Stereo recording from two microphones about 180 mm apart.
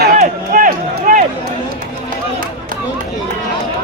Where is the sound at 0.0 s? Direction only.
50° right (ahead or behind).